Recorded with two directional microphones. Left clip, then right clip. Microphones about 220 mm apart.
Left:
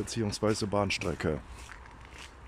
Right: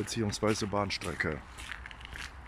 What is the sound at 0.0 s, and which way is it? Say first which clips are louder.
Speech: left 1 dB; centre (ahead or behind).